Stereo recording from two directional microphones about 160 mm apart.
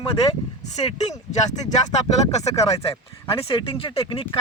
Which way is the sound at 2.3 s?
45° left (ahead or behind).